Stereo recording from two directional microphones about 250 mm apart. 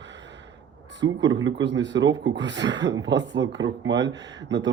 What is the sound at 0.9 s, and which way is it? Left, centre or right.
Speech, right.